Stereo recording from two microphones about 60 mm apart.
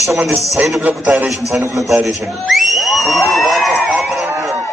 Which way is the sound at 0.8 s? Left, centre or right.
Right.